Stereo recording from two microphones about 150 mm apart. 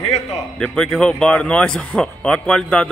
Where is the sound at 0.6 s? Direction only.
5° left (ahead or behind).